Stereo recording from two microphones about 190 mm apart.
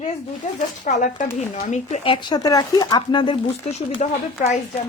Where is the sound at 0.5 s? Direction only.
40° left (ahead or behind).